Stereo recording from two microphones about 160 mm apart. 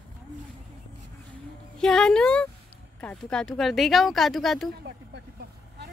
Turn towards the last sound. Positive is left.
turn(degrees=0)  # may be behind; listen again after turning